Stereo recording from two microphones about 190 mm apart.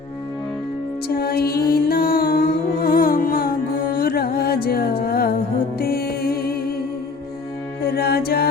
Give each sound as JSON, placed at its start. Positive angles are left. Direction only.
{"t": 1.0, "sound": "music", "side_deg": 55}
{"t": 7.9, "sound": "music", "side_deg": 55}